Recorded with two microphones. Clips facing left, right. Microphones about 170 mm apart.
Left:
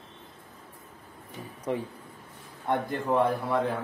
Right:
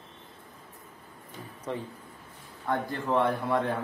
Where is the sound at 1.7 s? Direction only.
15° left (ahead or behind).